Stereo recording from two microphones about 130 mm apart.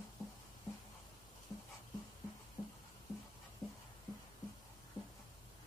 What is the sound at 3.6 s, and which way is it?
Music, centre (ahead or behind).